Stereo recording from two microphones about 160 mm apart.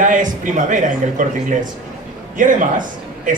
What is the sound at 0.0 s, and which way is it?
Speech, 55° right (ahead or behind).